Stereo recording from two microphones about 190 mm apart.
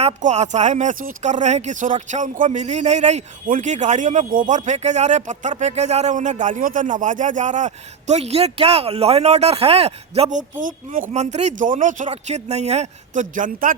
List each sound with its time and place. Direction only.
0.0 s speech: 35° right (ahead or behind)
10.6 s speech: 45° right (ahead or behind)